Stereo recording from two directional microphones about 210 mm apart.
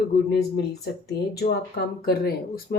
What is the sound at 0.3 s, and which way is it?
Speech, 50° left (ahead or behind).